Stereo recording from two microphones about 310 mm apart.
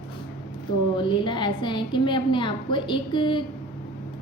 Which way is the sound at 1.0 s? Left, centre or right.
Centre.